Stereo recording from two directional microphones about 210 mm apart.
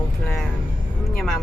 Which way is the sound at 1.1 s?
5° left (ahead or behind).